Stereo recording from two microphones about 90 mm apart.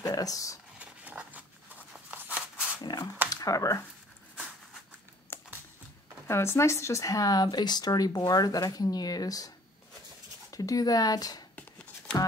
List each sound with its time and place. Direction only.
0.0 s speech: 45° left (ahead or behind)
0.7 s a sound: 15° right (ahead or behind)
2.8 s speech: 50° left (ahead or behind)
3.3 s speech: 40° left (ahead or behind)
5.3 s a sound: 25° left (ahead or behind)
6.2 s speech: 30° left (ahead or behind)
10.5 s speech: 40° left (ahead or behind)